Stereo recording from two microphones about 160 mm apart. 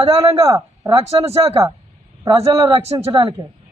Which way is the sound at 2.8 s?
35° right (ahead or behind).